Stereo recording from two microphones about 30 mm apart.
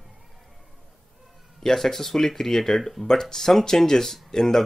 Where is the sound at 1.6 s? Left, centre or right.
Centre.